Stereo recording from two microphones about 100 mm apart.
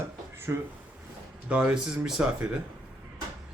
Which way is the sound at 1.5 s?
10° right (ahead or behind).